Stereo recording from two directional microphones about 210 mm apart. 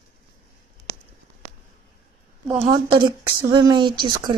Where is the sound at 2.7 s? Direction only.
20° right (ahead or behind).